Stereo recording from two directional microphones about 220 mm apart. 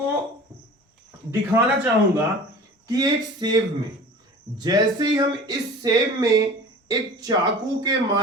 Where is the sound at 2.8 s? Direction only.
15° right (ahead or behind).